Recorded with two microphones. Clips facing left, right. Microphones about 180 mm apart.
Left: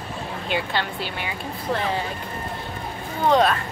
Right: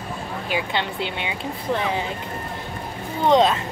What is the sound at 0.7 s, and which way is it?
A woman's voice, 20° right (ahead or behind).